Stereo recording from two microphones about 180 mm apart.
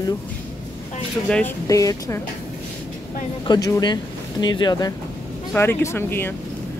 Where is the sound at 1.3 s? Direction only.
5° left (ahead or behind).